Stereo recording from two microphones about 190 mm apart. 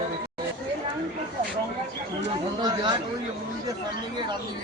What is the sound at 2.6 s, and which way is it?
Chatter, 20° right (ahead or behind).